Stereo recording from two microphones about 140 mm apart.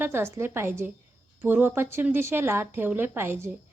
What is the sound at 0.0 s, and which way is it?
A woman's voice, 20° right (ahead or behind).